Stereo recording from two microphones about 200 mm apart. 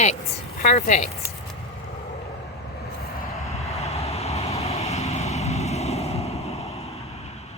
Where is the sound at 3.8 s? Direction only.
30° left (ahead or behind).